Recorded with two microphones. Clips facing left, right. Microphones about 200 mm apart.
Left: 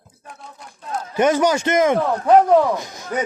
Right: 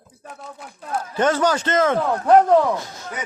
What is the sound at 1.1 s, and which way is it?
A man's voice, 10° left (ahead or behind).